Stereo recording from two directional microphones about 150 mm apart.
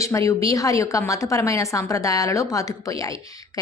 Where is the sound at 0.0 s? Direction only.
20° left (ahead or behind).